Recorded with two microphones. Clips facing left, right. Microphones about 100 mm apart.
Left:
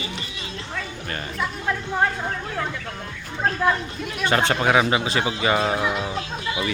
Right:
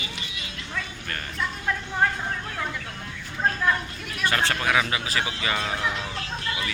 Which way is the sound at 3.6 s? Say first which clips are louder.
Left 4 dB; 25° left (ahead or behind).